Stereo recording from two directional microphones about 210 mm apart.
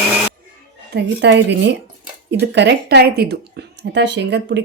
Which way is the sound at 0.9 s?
55° right (ahead or behind).